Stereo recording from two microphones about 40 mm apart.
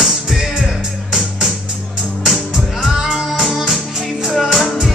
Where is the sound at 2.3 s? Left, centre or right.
Centre.